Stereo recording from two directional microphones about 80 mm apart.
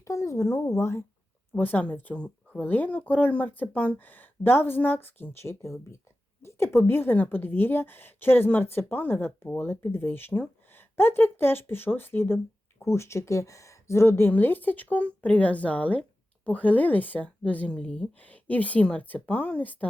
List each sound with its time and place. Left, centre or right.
0.0 s speech: left
1.5 s speech: left
6.4 s a sound: left
6.7 s speech: left